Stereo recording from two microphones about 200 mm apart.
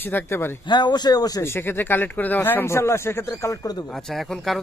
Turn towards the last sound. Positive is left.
turn(degrees=0)  # may be behind; listen again after turning